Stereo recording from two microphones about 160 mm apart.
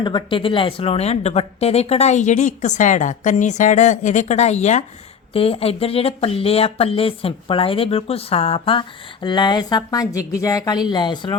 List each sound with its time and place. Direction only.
0.0 s a woman's voice: 30° left (ahead or behind)